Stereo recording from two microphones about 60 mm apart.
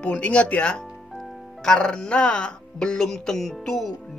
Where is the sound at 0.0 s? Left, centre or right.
Left.